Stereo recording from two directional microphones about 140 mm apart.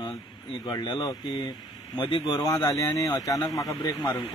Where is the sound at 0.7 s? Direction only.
30° left (ahead or behind).